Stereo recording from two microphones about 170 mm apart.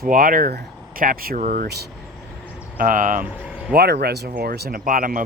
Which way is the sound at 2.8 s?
55° right (ahead or behind).